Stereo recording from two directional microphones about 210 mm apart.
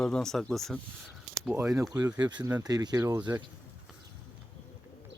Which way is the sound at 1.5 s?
10° right (ahead or behind).